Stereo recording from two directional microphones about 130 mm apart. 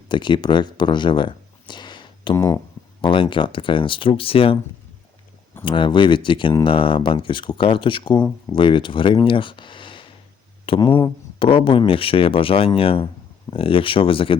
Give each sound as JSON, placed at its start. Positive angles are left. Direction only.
{"t": 0.1, "sound": "speech", "side_deg": 35}
{"t": 2.3, "sound": "speech", "side_deg": 25}
{"t": 3.0, "sound": "speech", "side_deg": 40}
{"t": 5.6, "sound": "speech", "side_deg": 40}